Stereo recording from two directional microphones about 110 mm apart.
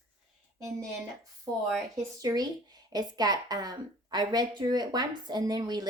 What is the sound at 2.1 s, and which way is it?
Speech, 35° right (ahead or behind).